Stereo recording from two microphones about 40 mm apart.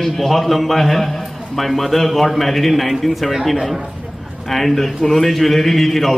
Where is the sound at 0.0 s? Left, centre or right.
Centre.